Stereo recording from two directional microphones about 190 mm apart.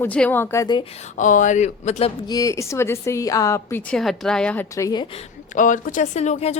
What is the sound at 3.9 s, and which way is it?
A woman's voice, centre (ahead or behind).